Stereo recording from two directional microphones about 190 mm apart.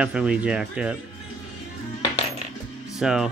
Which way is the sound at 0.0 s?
5° right (ahead or behind).